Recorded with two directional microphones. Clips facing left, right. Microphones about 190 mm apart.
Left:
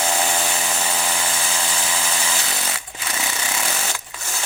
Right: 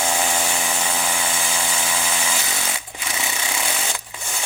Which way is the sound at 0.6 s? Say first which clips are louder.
Even; 10° right (ahead or behind).